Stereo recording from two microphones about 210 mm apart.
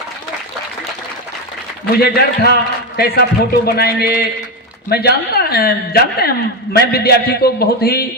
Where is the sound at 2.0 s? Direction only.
50° left (ahead or behind).